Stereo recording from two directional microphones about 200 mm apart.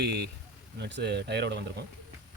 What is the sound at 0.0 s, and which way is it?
Speech, 55° right (ahead or behind).